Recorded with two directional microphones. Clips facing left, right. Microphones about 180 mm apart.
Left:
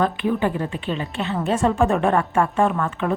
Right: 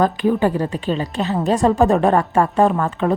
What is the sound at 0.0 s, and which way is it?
A woman's voice, 40° right (ahead or behind).